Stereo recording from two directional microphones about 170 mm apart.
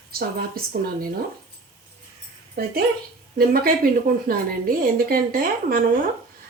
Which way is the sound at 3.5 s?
60° right (ahead or behind).